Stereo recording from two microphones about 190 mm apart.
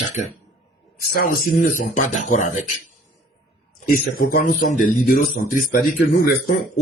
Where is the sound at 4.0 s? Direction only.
50° left (ahead or behind).